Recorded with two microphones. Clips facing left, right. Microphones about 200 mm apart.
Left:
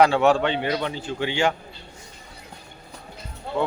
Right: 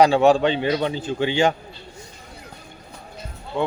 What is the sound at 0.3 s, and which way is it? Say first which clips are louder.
A man's voice: right 3 dB; 15° right (ahead or behind).